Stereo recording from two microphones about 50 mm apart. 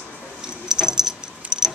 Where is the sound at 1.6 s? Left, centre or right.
Centre.